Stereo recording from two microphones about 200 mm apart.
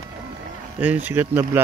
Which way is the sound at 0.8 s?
10° right (ahead or behind).